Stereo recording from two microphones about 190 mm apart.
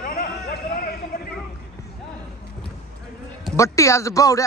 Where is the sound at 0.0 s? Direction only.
50° left (ahead or behind).